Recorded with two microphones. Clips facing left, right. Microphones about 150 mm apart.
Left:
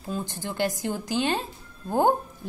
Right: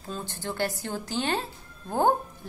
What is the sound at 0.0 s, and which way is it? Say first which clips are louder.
A woman's voice: left 3 dB; 15° left (ahead or behind).